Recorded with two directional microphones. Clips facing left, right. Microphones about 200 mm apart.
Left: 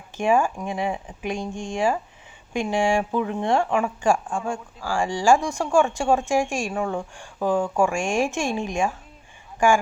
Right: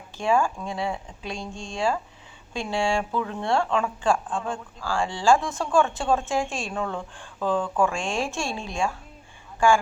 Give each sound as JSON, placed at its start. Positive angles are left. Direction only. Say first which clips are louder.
{"t": 0.2, "sound": "speech", "louder": "left 2 dB", "side_deg": 15}